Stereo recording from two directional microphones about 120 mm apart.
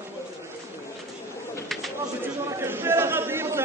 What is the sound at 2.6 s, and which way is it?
Chatter, 20° right (ahead or behind).